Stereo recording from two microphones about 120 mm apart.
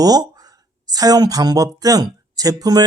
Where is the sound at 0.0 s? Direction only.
30° right (ahead or behind).